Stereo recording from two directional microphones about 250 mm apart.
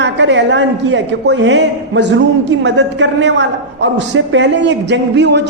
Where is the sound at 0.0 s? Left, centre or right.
Right.